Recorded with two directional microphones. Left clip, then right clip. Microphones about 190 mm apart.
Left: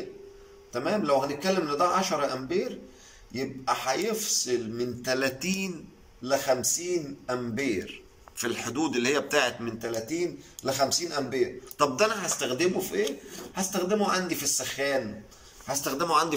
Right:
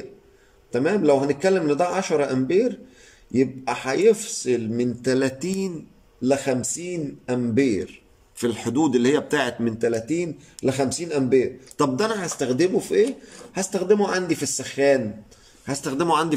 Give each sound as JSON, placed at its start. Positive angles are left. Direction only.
{"t": 0.7, "sound": "a man's voice", "side_deg": -60}
{"t": 6.2, "sound": "a man's voice", "side_deg": -60}
{"t": 11.9, "sound": "a man's voice", "side_deg": -45}